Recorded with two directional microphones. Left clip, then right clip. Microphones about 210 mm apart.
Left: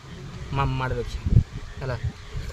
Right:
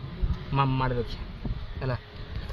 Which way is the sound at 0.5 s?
20° left (ahead or behind).